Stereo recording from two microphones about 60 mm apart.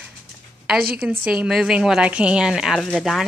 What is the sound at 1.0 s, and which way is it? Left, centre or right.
Speech, right.